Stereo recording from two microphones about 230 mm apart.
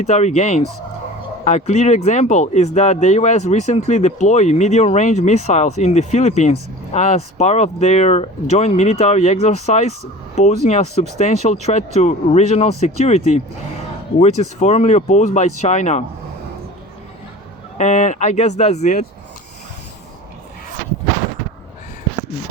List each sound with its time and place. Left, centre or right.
0.0 s speech: left
17.7 s speech: left